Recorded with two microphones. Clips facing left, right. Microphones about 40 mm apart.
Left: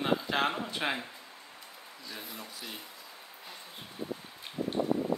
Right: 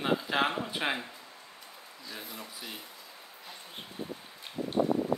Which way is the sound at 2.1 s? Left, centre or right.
Centre.